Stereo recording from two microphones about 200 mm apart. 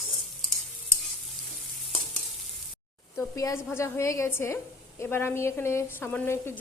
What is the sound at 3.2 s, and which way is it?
A woman's voice, 15° left (ahead or behind).